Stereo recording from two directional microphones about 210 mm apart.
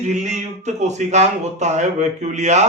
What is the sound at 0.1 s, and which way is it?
Speech, 35° right (ahead or behind).